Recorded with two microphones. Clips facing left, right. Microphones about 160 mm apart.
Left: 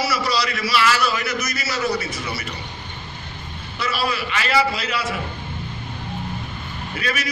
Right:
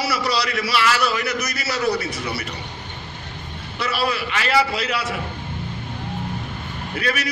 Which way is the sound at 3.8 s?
60° right (ahead or behind).